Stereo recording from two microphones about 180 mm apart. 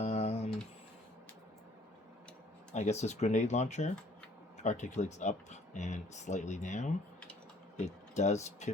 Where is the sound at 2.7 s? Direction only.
40° left (ahead or behind).